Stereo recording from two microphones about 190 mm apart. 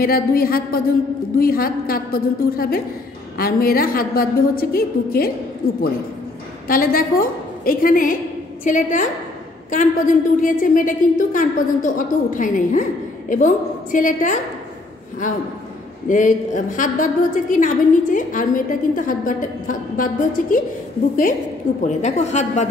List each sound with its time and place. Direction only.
0.0 s a woman's voice: 50° left (ahead or behind)
6.7 s a woman's voice: 50° left (ahead or behind)
13.9 s a woman's voice: 45° left (ahead or behind)
16.1 s a woman's voice: 45° left (ahead or behind)
21.8 s a woman's voice: 35° left (ahead or behind)